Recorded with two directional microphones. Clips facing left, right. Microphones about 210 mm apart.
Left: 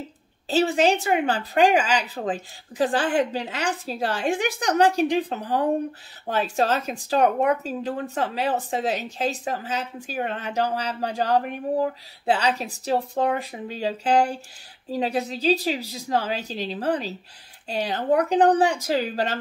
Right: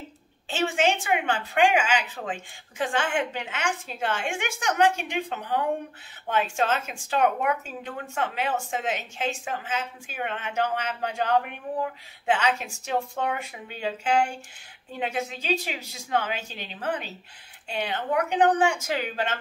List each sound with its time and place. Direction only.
0.5 s speech: 35° left (ahead or behind)